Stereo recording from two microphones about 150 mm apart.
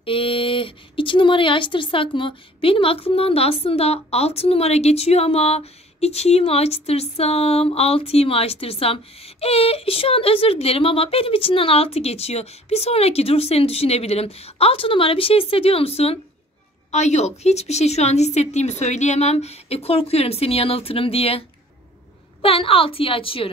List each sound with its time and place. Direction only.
0.0 s a woman's voice: 35° left (ahead or behind)